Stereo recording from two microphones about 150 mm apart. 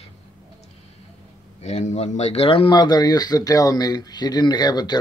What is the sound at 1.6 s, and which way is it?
Speech, 50° left (ahead or behind).